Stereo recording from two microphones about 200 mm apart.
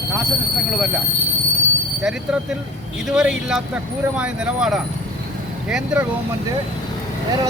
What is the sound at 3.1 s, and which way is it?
Speech, centre (ahead or behind).